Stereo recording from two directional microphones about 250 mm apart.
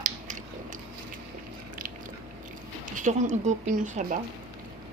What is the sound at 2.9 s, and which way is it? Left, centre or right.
A woman's voice, right.